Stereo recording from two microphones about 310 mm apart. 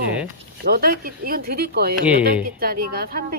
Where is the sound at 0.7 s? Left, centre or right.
Right.